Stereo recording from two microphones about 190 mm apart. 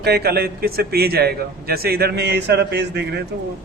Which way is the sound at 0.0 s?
55° right (ahead or behind).